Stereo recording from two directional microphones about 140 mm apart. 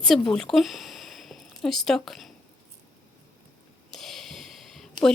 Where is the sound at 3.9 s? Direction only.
5° left (ahead or behind).